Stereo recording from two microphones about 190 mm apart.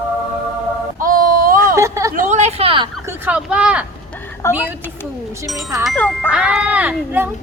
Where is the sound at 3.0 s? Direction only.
10° right (ahead or behind); by 6.3 s 10° left (ahead or behind).